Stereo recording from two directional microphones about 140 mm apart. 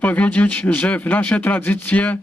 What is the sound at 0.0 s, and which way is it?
Speech, 10° left (ahead or behind).